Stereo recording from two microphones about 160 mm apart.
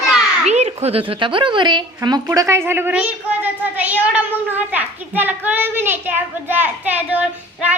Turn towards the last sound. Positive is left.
turn(degrees=-10)  # may be behind; listen again after turning